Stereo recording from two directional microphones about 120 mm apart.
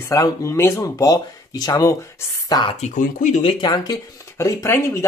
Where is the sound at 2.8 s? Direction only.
80° left.